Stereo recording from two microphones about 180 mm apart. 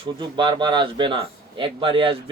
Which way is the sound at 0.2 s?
25° right (ahead or behind).